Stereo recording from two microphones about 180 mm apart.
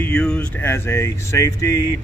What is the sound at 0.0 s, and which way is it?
Speech, 5° left (ahead or behind).